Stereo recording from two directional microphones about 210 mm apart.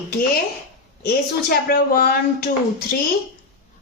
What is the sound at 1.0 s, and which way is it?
Speech, 45° left (ahead or behind).